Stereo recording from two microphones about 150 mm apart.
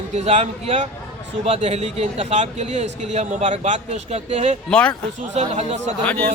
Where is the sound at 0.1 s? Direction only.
50° right (ahead or behind).